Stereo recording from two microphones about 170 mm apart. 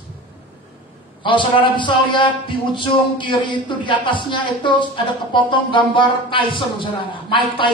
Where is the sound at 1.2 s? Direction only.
30° left (ahead or behind).